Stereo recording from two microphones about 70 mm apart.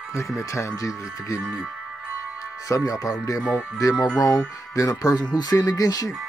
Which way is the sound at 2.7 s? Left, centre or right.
Left.